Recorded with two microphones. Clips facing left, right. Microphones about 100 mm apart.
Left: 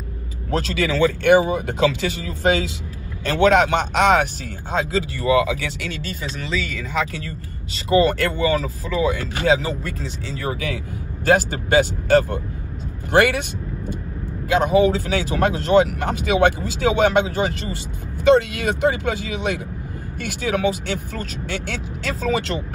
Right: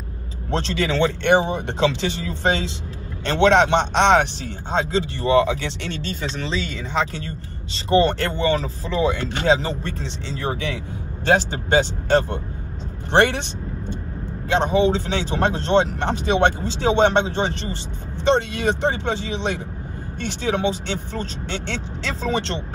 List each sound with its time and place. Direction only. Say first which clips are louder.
0.5 s a man's voice: left 1 dB; 30° right (ahead or behind)
14.5 s a man's voice: left 2 dB; 30° right (ahead or behind)